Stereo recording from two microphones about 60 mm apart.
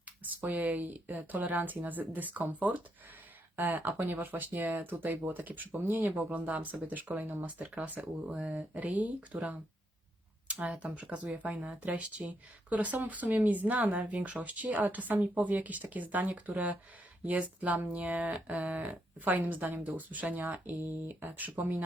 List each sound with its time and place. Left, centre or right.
0.2 s speech: right
3.5 s speech: right